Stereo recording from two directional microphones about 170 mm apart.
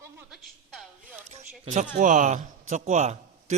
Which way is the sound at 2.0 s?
45° right (ahead or behind).